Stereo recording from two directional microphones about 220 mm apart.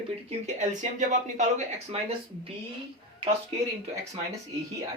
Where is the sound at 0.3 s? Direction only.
30° right (ahead or behind).